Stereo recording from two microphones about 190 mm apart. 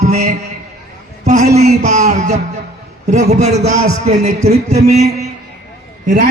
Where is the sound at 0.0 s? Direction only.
35° right (ahead or behind).